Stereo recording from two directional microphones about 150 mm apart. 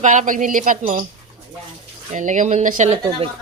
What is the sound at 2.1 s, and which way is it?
Speech, 55° right (ahead or behind).